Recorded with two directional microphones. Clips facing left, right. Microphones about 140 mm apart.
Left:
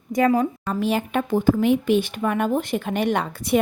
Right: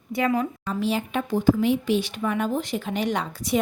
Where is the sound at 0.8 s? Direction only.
55° left (ahead or behind).